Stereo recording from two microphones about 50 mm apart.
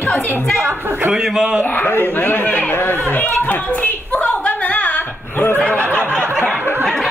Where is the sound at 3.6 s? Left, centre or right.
Left.